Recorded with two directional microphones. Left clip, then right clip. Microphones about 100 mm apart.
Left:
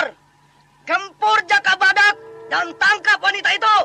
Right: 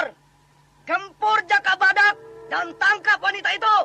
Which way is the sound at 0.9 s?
30° right (ahead or behind).